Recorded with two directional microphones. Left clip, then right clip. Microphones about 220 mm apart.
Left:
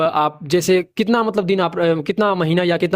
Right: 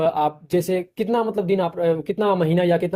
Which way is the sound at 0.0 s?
40° left (ahead or behind).